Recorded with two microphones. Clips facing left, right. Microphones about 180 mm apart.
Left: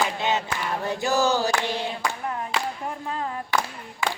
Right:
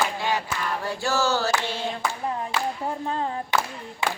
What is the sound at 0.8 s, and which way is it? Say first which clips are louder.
Mantra: left 3 dB; 20° left (ahead or behind).